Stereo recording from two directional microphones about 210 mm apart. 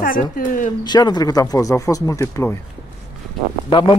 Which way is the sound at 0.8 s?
20° left (ahead or behind).